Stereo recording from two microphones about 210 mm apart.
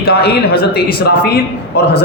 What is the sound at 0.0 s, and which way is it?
Speech, 50° left (ahead or behind).